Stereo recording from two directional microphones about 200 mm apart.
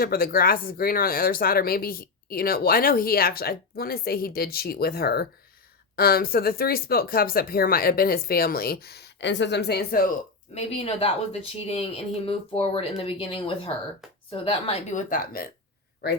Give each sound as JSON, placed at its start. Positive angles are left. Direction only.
{"t": 0.0, "sound": "speech", "side_deg": 45}
{"t": 10.5, "sound": "a woman's voice", "side_deg": 30}